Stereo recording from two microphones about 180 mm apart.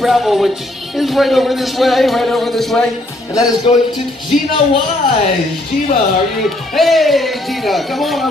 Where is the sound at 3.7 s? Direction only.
30° left (ahead or behind).